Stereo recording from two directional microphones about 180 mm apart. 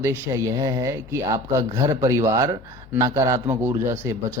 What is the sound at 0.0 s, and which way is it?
Speech, 15° right (ahead or behind).